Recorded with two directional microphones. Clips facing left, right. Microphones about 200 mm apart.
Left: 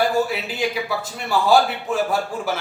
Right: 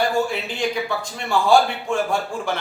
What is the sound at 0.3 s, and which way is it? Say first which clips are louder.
Speech: even; 5° left (ahead or behind).